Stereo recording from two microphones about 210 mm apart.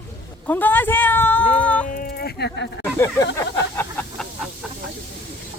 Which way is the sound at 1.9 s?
45° left (ahead or behind).